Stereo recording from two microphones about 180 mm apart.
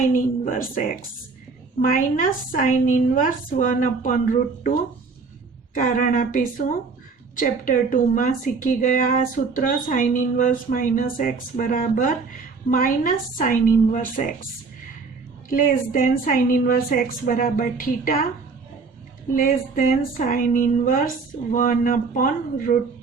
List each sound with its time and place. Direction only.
0.1 s a woman's voice: 45° left (ahead or behind)
5.7 s a woman's voice: 45° left (ahead or behind)
15.4 s a woman's voice: 50° left (ahead or behind)
19.3 s a woman's voice: 50° left (ahead or behind)